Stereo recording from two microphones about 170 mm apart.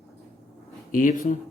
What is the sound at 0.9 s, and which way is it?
Speech, 50° left (ahead or behind).